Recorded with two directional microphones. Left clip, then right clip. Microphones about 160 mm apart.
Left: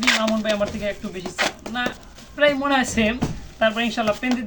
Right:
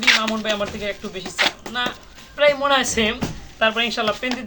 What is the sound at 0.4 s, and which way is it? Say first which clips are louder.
Speech: left 1 dB; 10° right (ahead or behind).